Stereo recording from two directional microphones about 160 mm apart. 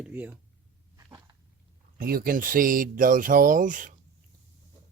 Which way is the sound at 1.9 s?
65° right (ahead or behind).